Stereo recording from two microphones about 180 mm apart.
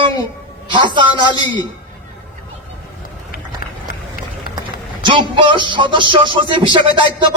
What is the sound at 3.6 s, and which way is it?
Run, 50° left (ahead or behind).